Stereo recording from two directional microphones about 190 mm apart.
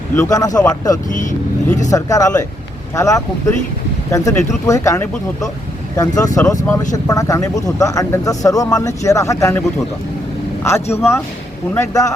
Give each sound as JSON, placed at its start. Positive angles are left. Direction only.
{"t": 0.2, "sound": "speech", "side_deg": 20}